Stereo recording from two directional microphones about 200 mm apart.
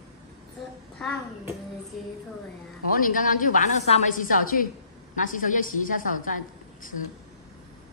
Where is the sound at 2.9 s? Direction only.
45° left (ahead or behind).